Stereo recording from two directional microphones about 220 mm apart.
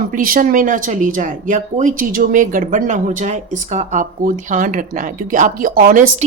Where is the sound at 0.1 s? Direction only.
40° right (ahead or behind).